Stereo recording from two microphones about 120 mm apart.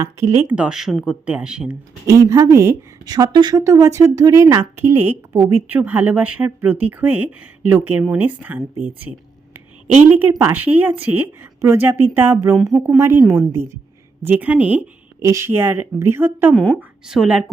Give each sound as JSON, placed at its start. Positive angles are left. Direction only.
{"t": 0.0, "sound": "speech", "side_deg": -30}
{"t": 0.5, "sound": "a woman's voice", "side_deg": -5}
{"t": 2.0, "sound": "speech", "side_deg": -25}
{"t": 3.1, "sound": "speech", "side_deg": -35}
{"t": 3.6, "sound": "a woman's voice", "side_deg": -25}
{"t": 10.2, "sound": "a woman's voice", "side_deg": -15}
{"t": 15.2, "sound": "speech", "side_deg": -25}
{"t": 17.1, "sound": "a woman's voice", "side_deg": -5}